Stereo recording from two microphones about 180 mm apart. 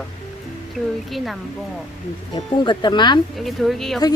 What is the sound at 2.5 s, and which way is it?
Speech, 25° left (ahead or behind).